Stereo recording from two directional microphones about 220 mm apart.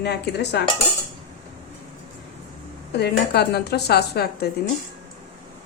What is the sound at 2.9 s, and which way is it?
Speech, 45° left (ahead or behind).